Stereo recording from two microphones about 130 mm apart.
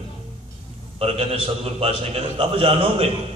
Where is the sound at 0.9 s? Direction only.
50° right (ahead or behind).